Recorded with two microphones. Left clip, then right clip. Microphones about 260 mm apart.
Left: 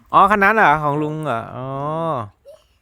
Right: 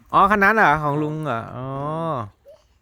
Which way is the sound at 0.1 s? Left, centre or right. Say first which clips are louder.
Left 3 dB; centre.